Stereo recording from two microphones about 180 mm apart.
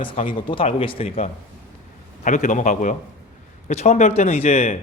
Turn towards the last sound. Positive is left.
turn(degrees=35)  # may be behind; listen again after turning